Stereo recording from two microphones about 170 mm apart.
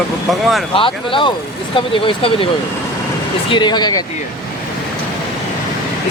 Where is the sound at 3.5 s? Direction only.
25° left (ahead or behind).